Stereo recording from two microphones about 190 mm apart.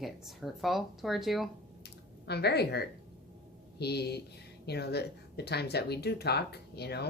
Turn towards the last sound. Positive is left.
turn(degrees=60)  # may be behind; listen again after turning